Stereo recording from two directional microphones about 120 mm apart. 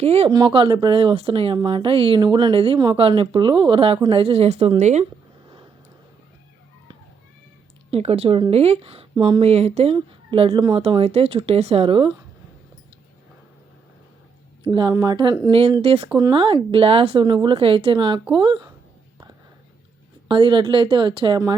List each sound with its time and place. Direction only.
0.0 s speech: 60° right (ahead or behind)
0.3 s speech: 40° right (ahead or behind)
0.9 s speech: 50° right (ahead or behind)
2.7 s speech: 35° right (ahead or behind); by 4.7 s 60° right (ahead or behind)
4.8 s speech: 75° right (ahead or behind)
7.9 s speech: 60° right (ahead or behind)
9.1 s speech: 40° right (ahead or behind)
9.4 s speech: 60° right (ahead or behind)
10.6 s speech: 35° right (ahead or behind)
10.8 s speech: 60° right (ahead or behind)
14.6 s speech: 40° right (ahead or behind)
15.4 s speech: 50° right (ahead or behind)
16.3 s speech: 45° right (ahead or behind)
20.2 s speech: 45° right (ahead or behind)